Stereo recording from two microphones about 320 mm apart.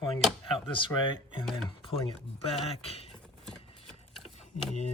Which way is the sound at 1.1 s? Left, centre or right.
Centre.